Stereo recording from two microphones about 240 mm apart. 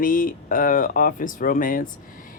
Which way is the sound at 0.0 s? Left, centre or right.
Left.